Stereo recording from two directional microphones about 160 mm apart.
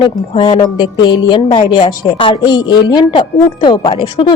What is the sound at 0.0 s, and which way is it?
A woman's voice, 35° left (ahead or behind).